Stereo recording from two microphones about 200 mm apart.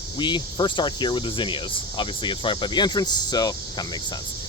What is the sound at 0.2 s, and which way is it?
Speech, 20° left (ahead or behind).